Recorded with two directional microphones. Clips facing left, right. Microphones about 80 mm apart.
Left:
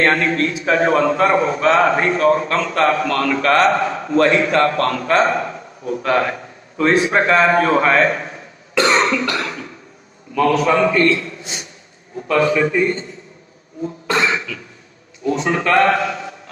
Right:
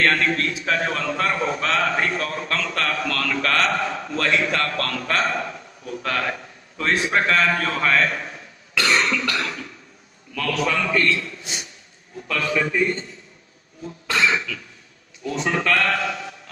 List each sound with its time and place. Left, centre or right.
0.0 s a man's voice: left
13.8 s cough: left
15.2 s a man's voice: left